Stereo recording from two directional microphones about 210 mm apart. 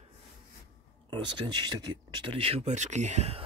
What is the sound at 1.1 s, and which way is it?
Speech, 20° right (ahead or behind).